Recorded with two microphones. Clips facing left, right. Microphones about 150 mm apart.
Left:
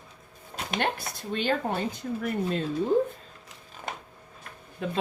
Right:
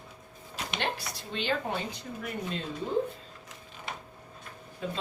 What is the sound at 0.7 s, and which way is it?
Speech, 50° left (ahead or behind).